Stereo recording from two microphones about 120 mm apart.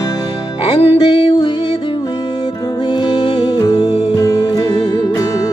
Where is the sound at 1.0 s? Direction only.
40° left (ahead or behind).